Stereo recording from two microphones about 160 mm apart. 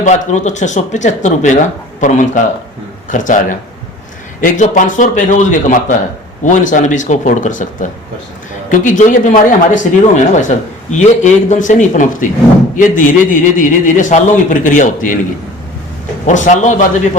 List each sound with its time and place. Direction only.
0.0 s speech: 50° left (ahead or behind)
16.2 s speech: 50° left (ahead or behind)